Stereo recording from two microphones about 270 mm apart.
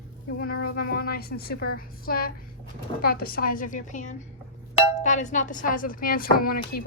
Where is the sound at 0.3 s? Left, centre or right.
Left.